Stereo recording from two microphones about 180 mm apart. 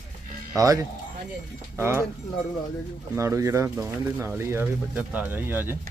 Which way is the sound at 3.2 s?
15° right (ahead or behind).